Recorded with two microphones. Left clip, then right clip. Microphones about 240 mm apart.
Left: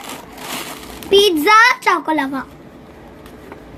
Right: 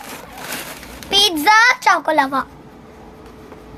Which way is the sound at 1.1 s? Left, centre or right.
Right.